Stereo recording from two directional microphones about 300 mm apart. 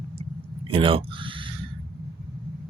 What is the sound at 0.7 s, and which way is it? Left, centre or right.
Speech, centre.